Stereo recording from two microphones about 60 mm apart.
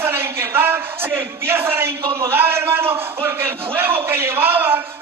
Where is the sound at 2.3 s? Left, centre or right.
Right.